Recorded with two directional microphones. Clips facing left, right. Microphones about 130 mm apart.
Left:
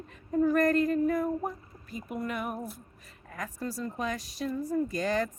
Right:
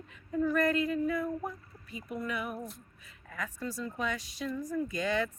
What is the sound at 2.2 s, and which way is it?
Speech, 40° left (ahead or behind).